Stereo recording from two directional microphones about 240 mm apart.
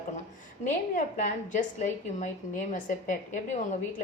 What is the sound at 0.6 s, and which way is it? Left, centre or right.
A woman's voice, left.